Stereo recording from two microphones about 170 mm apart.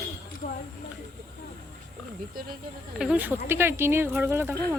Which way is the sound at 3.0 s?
10° right (ahead or behind).